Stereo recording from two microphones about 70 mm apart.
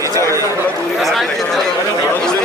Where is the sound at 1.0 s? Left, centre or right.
Centre.